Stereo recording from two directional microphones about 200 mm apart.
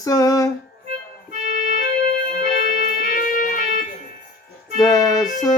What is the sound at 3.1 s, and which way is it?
Music, 45° left (ahead or behind).